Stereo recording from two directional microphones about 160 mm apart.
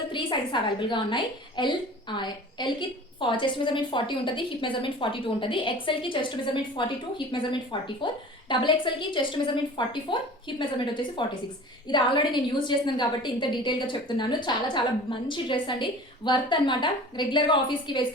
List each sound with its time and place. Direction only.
0.1 s a woman's voice: 30° left (ahead or behind)